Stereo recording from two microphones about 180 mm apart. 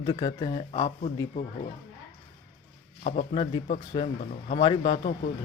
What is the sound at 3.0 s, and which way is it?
Speech, 40° left (ahead or behind).